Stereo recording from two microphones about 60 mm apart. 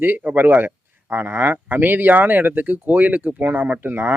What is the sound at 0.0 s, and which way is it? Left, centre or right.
Speech, right.